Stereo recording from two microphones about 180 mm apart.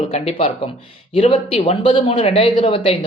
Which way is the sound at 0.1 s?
35° left (ahead or behind).